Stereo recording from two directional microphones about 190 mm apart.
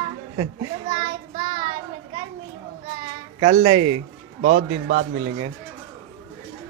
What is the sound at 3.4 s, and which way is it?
Speech, 35° right (ahead or behind).